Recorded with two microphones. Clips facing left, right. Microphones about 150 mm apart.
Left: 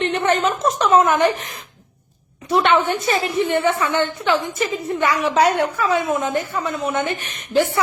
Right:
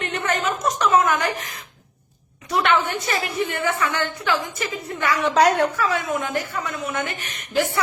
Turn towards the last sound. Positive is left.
turn(degrees=25)  # may be behind; listen again after turning